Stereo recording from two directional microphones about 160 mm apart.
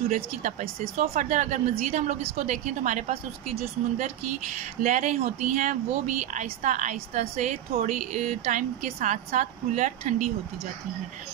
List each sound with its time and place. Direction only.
0.1 s speech: 50° right (ahead or behind)